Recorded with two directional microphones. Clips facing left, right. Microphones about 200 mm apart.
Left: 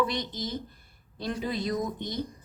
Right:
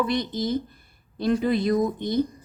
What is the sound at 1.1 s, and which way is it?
Speech, 55° right (ahead or behind).